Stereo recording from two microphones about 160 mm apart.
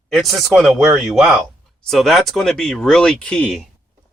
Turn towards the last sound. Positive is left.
turn(degrees=5)  # may be behind; listen again after turning